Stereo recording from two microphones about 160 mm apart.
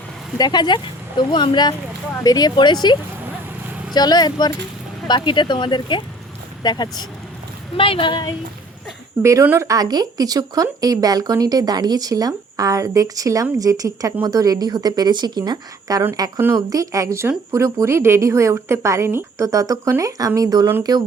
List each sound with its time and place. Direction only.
0.3 s speech: 25° left (ahead or behind)
3.9 s speech: 25° left (ahead or behind)
9.2 s speech: 15° right (ahead or behind)